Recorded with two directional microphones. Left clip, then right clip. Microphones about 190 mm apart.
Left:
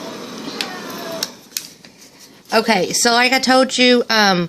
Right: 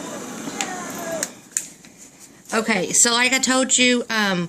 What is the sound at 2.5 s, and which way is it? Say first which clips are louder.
Speech: left 6 dB; 65° left (ahead or behind).